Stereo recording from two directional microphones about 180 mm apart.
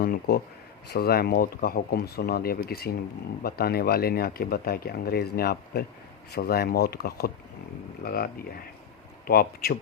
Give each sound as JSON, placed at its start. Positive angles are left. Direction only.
{"t": 0.0, "sound": "speech", "side_deg": 60}